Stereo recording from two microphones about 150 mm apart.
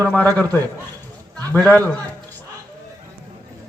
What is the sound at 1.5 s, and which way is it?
Speech, 10° left (ahead or behind).